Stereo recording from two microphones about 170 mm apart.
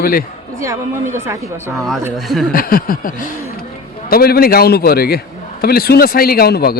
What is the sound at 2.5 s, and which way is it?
A man's voice, 60° left (ahead or behind).